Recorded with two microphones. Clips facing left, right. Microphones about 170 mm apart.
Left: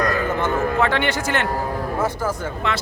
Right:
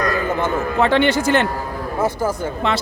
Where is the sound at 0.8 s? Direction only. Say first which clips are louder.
Right 5 dB; 30° right (ahead or behind).